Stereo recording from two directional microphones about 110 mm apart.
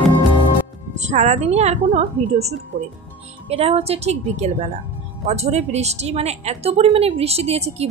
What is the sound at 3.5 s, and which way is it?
A woman's voice, 60° right (ahead or behind).